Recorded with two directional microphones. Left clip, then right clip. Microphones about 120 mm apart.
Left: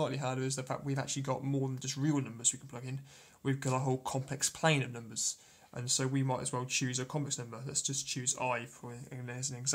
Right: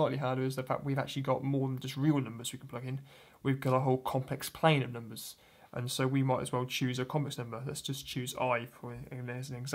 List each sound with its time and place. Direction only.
0.0 s speech: 30° right (ahead or behind)
5.8 s speech: 40° right (ahead or behind)
8.8 s speech: 15° right (ahead or behind)